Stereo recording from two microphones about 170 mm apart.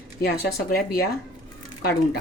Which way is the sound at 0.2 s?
65° left (ahead or behind).